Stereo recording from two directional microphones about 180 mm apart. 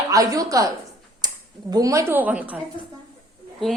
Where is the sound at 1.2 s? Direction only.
20° right (ahead or behind).